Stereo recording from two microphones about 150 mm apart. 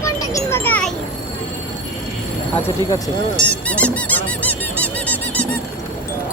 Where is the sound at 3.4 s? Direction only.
10° left (ahead or behind).